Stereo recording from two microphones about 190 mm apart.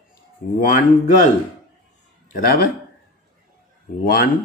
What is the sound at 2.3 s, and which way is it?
Speech, 50° left (ahead or behind).